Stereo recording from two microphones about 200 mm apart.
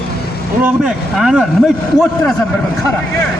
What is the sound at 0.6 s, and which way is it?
A man's voice, 5° right (ahead or behind).